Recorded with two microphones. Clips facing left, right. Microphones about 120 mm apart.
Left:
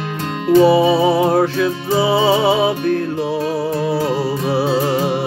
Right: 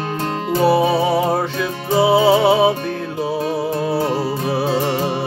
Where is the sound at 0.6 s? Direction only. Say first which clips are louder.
Left 2 dB; centre (ahead or behind).